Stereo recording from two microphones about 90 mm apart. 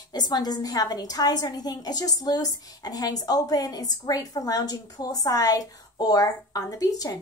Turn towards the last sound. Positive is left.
turn(degrees=40)  # may be behind; listen again after turning